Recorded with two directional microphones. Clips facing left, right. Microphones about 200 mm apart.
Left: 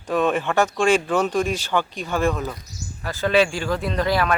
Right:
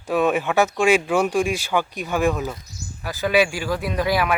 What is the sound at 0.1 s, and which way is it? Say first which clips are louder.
Speech: right 1 dB; 10° right (ahead or behind).